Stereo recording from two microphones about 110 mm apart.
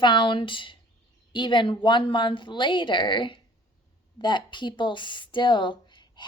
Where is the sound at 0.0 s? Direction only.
45° left (ahead or behind).